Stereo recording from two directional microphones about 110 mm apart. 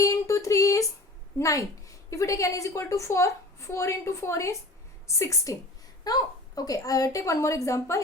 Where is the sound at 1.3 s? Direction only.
30° left (ahead or behind).